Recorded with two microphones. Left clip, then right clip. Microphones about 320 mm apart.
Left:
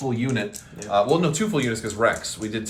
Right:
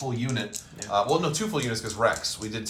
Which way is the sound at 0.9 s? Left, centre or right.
Centre.